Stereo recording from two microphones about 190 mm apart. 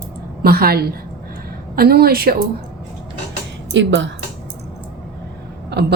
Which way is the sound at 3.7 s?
70° right (ahead or behind).